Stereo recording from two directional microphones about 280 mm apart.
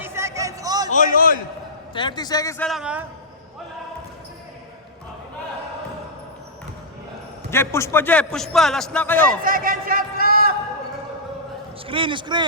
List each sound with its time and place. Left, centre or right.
0.0 s a sound: centre
0.9 s a man's voice: left
1.9 s a man's voice: centre
2.6 s a man's voice: centre
7.5 s a man's voice: centre
9.4 s speech: right
11.9 s a man's voice: centre